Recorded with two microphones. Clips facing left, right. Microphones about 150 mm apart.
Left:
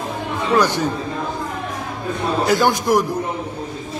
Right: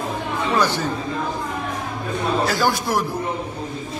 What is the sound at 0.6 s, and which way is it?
Speech, 15° left (ahead or behind).